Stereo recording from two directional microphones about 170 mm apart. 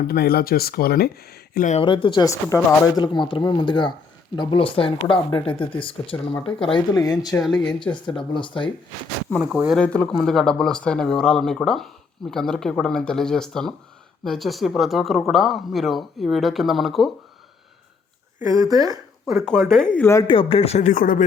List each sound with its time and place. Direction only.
0.1 s speech: 65° left (ahead or behind)
1.8 s speech: 30° left (ahead or behind)
6.9 s speech: 20° left (ahead or behind)
8.3 s speech: 30° left (ahead or behind)
9.4 s speech: 5° right (ahead or behind)
9.8 s speech: 5° left (ahead or behind)
18.6 s speech: 20° right (ahead or behind)
19.5 s speech: centre (ahead or behind)
20.2 s speech: 30° left (ahead or behind); by 21.2 s 50° left (ahead or behind)